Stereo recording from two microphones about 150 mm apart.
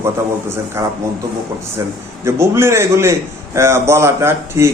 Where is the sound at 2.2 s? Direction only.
15° right (ahead or behind).